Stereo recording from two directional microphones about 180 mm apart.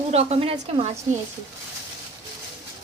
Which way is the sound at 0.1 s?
35° right (ahead or behind).